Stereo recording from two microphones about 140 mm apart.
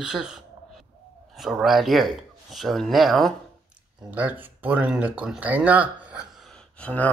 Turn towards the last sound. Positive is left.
turn(degrees=10)  # may be behind; listen again after turning